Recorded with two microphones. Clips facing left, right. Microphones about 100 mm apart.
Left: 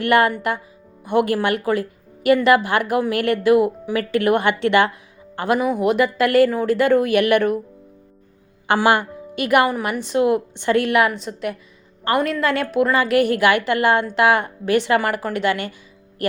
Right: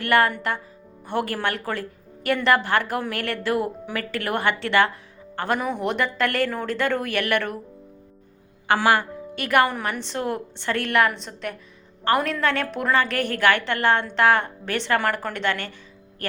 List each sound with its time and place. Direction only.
0.0 s a woman's voice: 15° left (ahead or behind)
5.4 s a woman's voice: 5° left (ahead or behind)
8.6 s a woman's voice: 20° left (ahead or behind)